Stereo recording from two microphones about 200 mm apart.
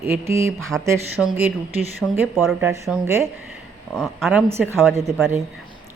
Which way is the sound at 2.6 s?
15° right (ahead or behind).